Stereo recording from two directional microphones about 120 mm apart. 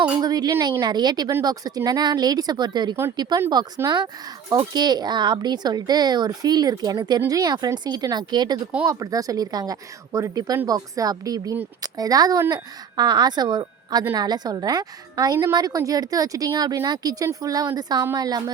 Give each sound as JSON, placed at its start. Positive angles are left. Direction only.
{"t": 0.2, "sound": "speech", "side_deg": -30}